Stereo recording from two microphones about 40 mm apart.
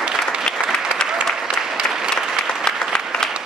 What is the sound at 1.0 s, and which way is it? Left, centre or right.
Applause, left.